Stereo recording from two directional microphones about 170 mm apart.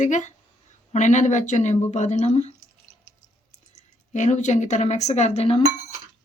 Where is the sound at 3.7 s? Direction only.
45° left (ahead or behind).